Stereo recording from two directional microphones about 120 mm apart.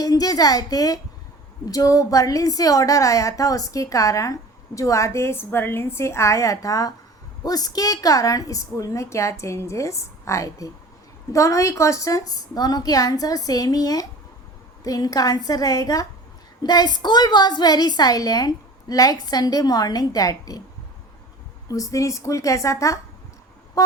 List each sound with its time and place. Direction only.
0.0 s a woman's voice: 30° left (ahead or behind)
21.7 s a woman's voice: 30° left (ahead or behind)
23.8 s vehicle: 30° left (ahead or behind)